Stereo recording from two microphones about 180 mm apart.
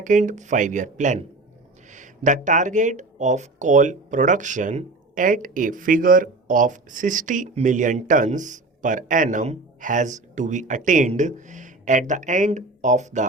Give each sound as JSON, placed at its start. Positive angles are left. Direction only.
{"t": 0.0, "sound": "speech", "side_deg": -45}